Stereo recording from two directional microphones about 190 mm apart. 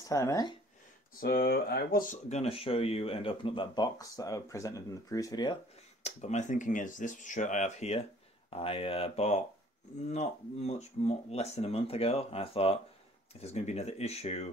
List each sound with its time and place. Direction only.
0.1 s speech: 15° left (ahead or behind)
1.2 s speech: 55° left (ahead or behind); by 5.6 s 20° left (ahead or behind)
6.0 s speech: 40° left (ahead or behind)